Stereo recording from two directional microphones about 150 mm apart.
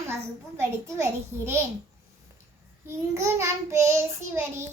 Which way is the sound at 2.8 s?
20° right (ahead or behind).